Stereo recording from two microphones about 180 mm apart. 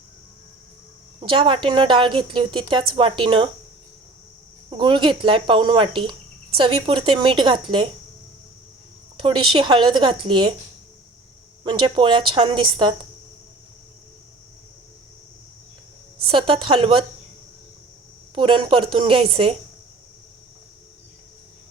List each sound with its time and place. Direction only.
1.2 s speech: 30° right (ahead or behind)
4.7 s speech: 25° right (ahead or behind)
9.1 s speech: 25° right (ahead or behind)
11.6 s speech: 25° right (ahead or behind)
16.2 s speech: 30° right (ahead or behind)
18.3 s speech: 25° right (ahead or behind)